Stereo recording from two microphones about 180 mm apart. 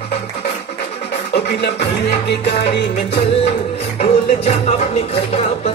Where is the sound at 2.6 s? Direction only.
65° left (ahead or behind).